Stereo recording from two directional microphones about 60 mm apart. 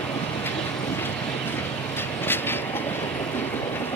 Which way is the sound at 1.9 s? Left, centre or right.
Left.